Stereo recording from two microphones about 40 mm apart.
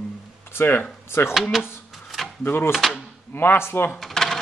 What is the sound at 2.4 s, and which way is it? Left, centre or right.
Speech, left.